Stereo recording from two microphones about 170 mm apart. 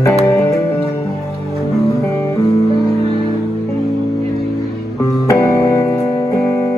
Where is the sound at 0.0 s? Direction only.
15° left (ahead or behind).